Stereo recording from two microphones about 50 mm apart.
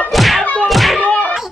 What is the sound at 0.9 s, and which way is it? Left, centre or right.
Slap, left.